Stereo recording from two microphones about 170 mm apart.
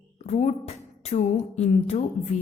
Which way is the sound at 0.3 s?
40° left (ahead or behind).